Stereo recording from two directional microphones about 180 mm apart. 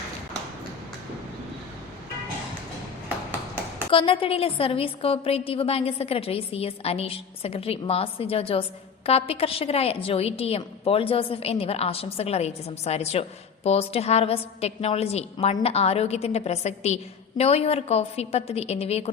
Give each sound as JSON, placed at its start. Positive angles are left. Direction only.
{"t": 3.9, "sound": "a woman's voice", "side_deg": 30}